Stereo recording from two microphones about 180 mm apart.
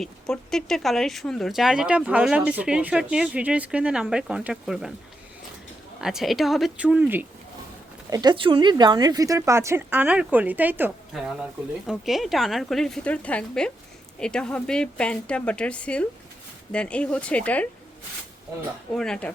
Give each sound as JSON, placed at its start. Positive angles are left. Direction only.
{"t": 0.0, "sound": "speech", "side_deg": 5}
{"t": 6.0, "sound": "speech", "side_deg": 0}
{"t": 8.1, "sound": "speech", "side_deg": -25}
{"t": 18.9, "sound": "speech", "side_deg": 5}